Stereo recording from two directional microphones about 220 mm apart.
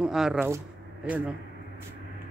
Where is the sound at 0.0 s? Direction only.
Centre (ahead or behind).